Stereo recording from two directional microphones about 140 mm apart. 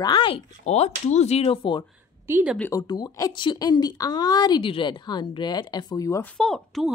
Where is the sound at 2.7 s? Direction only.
25° left (ahead or behind).